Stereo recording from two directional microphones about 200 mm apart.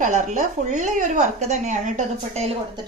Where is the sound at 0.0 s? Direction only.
35° right (ahead or behind).